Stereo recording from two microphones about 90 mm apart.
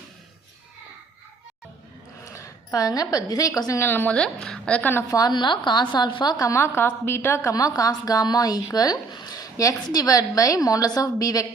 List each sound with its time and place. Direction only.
2.2 s a woman's voice: 30° left (ahead or behind)
3.8 s a woman's voice: 20° left (ahead or behind)
5.0 s speech: 45° left (ahead or behind)
5.3 s a woman's voice: 60° left (ahead or behind)
6.4 s a woman's voice: 30° left (ahead or behind)
7.5 s speech: 40° left (ahead or behind)